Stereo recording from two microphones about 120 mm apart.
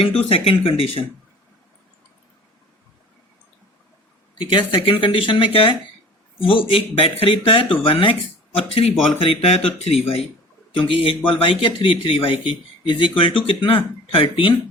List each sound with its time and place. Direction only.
0.0 s a man's voice: 55° left (ahead or behind)
4.4 s a man's voice: 40° left (ahead or behind)